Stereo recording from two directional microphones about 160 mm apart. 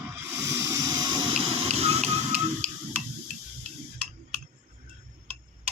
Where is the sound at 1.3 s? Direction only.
35° right (ahead or behind).